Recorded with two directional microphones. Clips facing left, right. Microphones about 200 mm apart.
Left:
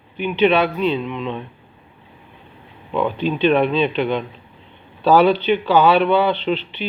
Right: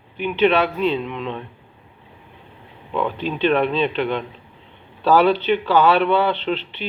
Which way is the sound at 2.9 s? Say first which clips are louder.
Left 3 dB; 10° left (ahead or behind).